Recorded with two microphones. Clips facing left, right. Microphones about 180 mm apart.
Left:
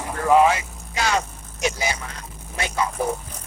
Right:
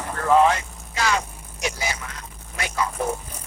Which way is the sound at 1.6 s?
20° left (ahead or behind).